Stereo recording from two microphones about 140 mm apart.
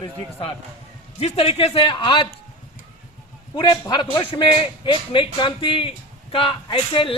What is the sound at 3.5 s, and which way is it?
A man's voice, 30° left (ahead or behind).